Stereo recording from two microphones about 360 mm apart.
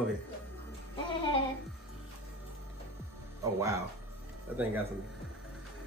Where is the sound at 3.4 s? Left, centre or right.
Centre.